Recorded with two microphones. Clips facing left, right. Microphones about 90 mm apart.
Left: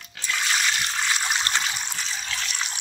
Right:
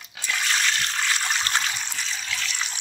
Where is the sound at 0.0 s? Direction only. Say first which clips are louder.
Even; 20° right (ahead or behind).